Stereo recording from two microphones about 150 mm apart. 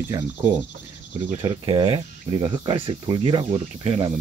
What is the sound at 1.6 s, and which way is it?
Speech, 35° right (ahead or behind).